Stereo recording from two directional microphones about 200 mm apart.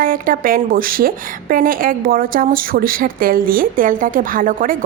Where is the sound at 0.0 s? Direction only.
45° right (ahead or behind).